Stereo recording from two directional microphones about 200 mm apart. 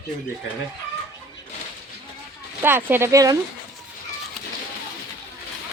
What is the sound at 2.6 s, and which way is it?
Speech, 10° right (ahead or behind).